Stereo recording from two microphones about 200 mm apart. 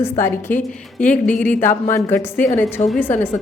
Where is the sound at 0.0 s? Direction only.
10° left (ahead or behind).